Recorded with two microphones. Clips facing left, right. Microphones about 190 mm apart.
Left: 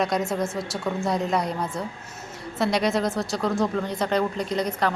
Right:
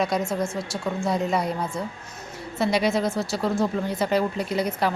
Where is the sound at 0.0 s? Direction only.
Centre (ahead or behind).